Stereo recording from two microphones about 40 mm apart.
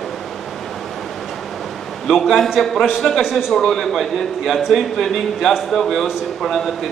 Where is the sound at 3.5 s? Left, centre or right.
Centre.